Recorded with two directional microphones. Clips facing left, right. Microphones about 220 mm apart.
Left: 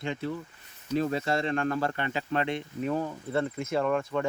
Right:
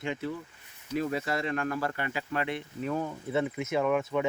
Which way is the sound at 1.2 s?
30° left (ahead or behind).